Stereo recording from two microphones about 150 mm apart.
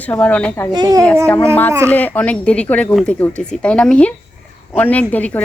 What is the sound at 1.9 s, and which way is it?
Speech, 10° left (ahead or behind).